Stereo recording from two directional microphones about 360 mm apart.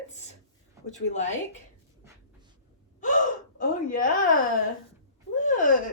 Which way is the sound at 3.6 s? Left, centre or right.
Left.